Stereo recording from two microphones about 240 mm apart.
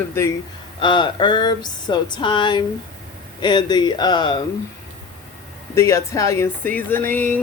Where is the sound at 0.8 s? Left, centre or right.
Centre.